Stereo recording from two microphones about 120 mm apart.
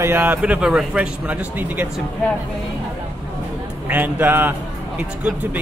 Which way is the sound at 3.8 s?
15° right (ahead or behind).